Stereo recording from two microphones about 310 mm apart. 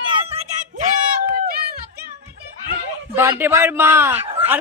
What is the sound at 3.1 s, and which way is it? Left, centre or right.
A man's voice, centre.